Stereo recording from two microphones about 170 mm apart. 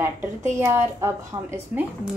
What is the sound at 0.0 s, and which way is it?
A woman's voice, 15° right (ahead or behind).